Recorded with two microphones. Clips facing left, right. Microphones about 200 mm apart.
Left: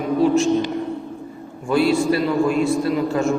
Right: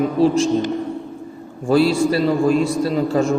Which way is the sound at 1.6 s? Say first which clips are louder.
Right 2 dB; 30° right (ahead or behind).